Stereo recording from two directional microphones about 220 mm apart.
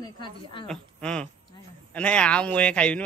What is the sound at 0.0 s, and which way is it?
Speech, 20° left (ahead or behind).